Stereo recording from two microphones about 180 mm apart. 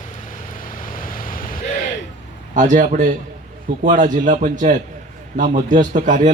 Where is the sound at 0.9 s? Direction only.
50° left (ahead or behind).